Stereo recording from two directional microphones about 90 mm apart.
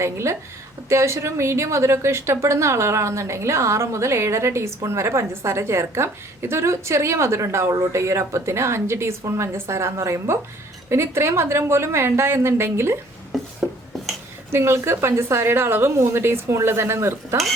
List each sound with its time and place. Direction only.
0.0 s a woman's voice: 30° right (ahead or behind)
13.3 s a sound: centre (ahead or behind)
14.5 s a woman's voice: 30° right (ahead or behind)